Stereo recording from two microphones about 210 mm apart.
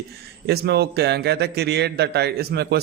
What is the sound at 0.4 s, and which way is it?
A man's voice, 50° right (ahead or behind).